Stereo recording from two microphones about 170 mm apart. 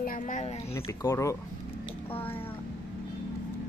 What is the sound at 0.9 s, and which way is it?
Speech, 15° left (ahead or behind).